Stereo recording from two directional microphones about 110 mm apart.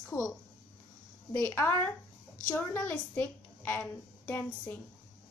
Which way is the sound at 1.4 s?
25° left (ahead or behind).